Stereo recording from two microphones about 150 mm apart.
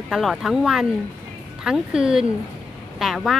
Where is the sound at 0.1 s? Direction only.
Centre (ahead or behind).